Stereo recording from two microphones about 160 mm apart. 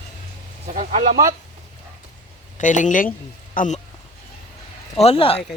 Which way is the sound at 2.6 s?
50° left (ahead or behind).